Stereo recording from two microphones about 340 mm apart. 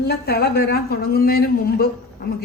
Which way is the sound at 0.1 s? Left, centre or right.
Left.